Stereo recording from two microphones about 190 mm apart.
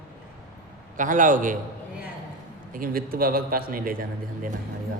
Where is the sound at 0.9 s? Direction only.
45° right (ahead or behind).